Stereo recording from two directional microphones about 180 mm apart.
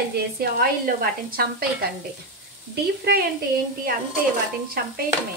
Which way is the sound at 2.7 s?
60° right (ahead or behind).